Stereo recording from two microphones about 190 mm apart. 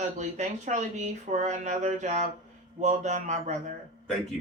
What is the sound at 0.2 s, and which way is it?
Speech, 40° right (ahead or behind).